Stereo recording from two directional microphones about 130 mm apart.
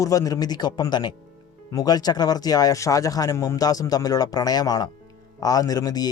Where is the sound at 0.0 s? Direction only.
25° left (ahead or behind).